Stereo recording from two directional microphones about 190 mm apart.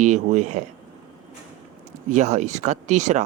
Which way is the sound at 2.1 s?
40° right (ahead or behind).